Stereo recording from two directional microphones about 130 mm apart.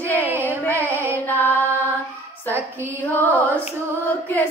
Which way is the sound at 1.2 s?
15° left (ahead or behind).